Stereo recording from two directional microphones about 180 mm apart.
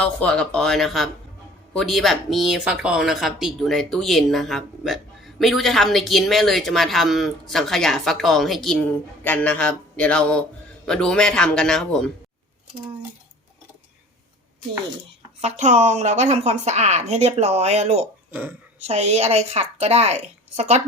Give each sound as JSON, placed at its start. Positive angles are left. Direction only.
{"t": 0.0, "sound": "a man's voice", "side_deg": 5}
{"t": 15.4, "sound": "a woman's voice", "side_deg": -40}
{"t": 18.3, "sound": "speech", "side_deg": -10}
{"t": 18.8, "sound": "a woman's voice", "side_deg": -35}